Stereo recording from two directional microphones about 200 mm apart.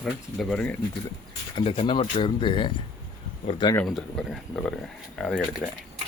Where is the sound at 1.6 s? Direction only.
25° left (ahead or behind).